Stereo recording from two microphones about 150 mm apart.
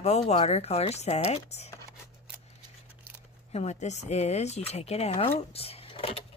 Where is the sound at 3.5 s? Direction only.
50° left (ahead or behind).